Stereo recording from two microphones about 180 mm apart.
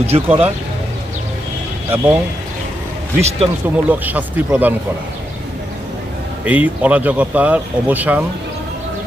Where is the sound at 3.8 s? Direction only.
10° right (ahead or behind).